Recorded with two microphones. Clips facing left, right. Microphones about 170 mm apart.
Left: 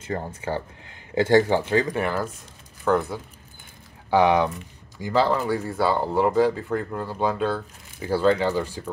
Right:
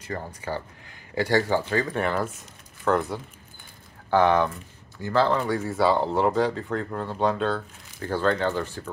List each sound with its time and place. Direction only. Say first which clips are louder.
0.0 s speech: left 4 dB; 25° left (ahead or behind)
2.0 s speech: even; 5° left (ahead or behind)
4.1 s speech: left 1 dB; 10° left (ahead or behind)